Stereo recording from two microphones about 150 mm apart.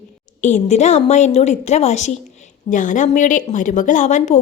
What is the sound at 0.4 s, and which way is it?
A woman's voice, 50° left (ahead or behind).